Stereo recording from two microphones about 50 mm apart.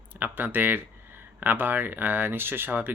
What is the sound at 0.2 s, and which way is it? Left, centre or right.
Speech, right.